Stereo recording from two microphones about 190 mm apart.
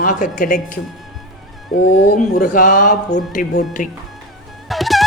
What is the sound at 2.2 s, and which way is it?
Speech, 45° left (ahead or behind).